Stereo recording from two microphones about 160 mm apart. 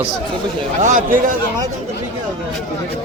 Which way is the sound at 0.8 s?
55° right (ahead or behind).